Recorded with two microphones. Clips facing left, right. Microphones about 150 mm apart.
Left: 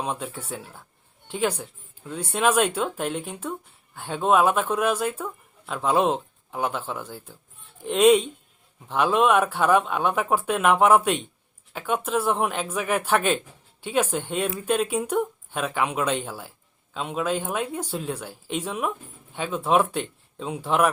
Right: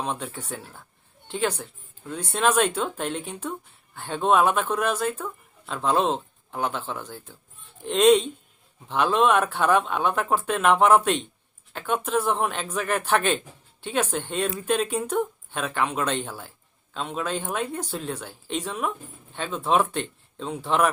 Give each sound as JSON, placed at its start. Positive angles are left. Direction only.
{"t": 0.0, "sound": "speech", "side_deg": 5}